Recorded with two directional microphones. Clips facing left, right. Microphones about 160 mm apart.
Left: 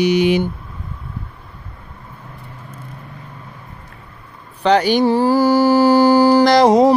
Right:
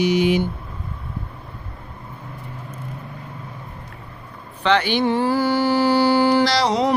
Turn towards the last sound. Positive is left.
turn(degrees=50)  # may be behind; listen again after turning